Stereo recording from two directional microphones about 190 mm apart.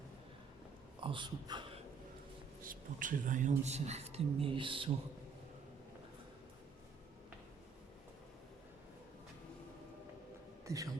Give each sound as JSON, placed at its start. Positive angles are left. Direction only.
{"t": 1.0, "sound": "speech", "side_deg": -25}
{"t": 2.6, "sound": "a woman's voice", "side_deg": -45}
{"t": 10.7, "sound": "a man's voice", "side_deg": -15}